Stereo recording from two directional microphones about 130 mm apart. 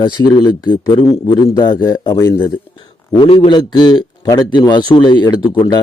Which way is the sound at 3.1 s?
40° left (ahead or behind).